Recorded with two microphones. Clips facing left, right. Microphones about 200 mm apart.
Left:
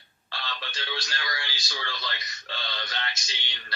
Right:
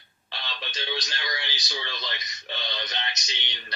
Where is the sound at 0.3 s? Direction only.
20° right (ahead or behind).